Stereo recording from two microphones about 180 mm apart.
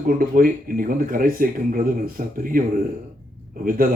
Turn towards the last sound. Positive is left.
turn(degrees=-50)  # may be behind; listen again after turning